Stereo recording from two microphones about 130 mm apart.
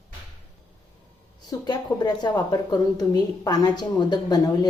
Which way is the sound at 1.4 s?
35° left (ahead or behind).